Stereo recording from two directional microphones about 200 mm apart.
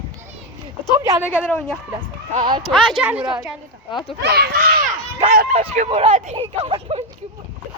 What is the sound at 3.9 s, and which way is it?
Speech, 25° left (ahead or behind).